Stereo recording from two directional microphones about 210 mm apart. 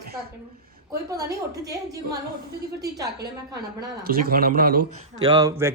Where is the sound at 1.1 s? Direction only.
15° right (ahead or behind).